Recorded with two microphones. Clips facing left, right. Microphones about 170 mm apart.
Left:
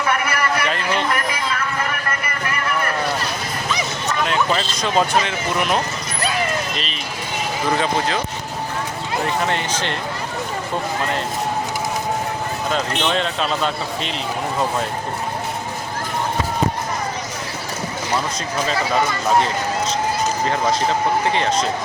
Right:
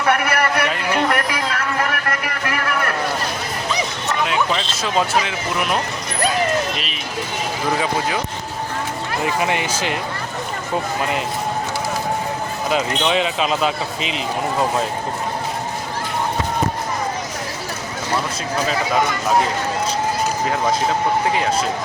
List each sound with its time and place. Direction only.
0.0 s a sound: 65° right (ahead or behind)
0.7 s a sound: 10° right (ahead or behind)
1.0 s vehicle: 75° right (ahead or behind)
4.2 s speech: centre (ahead or behind)
7.8 s speech: 10° right (ahead or behind)
9.2 s speech: 10° right (ahead or behind)
12.7 s speech: 5° right (ahead or behind)
20.4 s speech: 5° right (ahead or behind)